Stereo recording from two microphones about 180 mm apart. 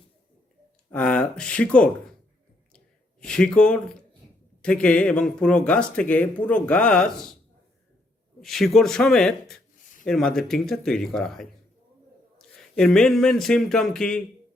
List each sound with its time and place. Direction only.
0.9 s speech: 5° left (ahead or behind)
2.7 s a sound: 5° left (ahead or behind)
4.6 s speech: 5° left (ahead or behind)
8.4 s speech: centre (ahead or behind)
9.7 s a sound: 45° left (ahead or behind)
10.1 s speech: centre (ahead or behind)